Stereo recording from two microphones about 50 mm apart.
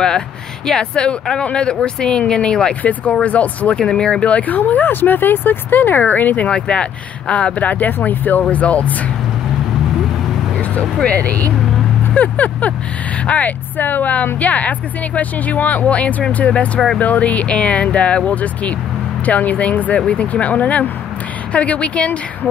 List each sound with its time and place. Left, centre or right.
0.7 s speech: centre
2.8 s speech: left
3.8 s speech: centre; by 6.5 s left
6.5 s speech: left
11.1 s speech: left